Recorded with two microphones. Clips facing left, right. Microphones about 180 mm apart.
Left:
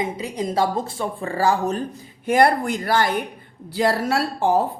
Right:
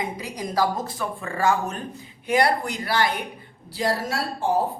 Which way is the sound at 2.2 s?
50° left (ahead or behind).